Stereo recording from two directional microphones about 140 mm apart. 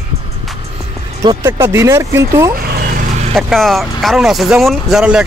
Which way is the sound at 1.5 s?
20° right (ahead or behind).